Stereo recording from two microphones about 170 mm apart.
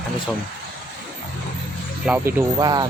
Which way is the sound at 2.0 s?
10° right (ahead or behind).